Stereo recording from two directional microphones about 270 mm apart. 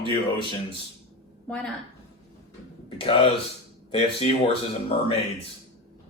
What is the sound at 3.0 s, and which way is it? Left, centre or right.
Speech, left.